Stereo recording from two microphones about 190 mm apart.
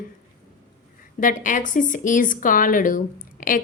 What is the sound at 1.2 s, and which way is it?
Speech, 45° left (ahead or behind).